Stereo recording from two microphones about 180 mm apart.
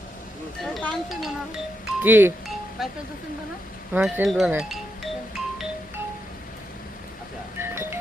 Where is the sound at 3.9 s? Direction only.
5° right (ahead or behind).